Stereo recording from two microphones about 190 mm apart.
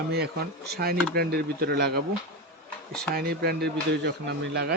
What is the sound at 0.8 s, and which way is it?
Speech, 55° right (ahead or behind).